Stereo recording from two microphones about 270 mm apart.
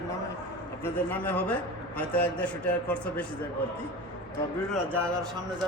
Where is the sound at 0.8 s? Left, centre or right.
Centre.